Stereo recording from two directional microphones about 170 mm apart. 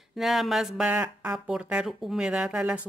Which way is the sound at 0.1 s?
Centre (ahead or behind).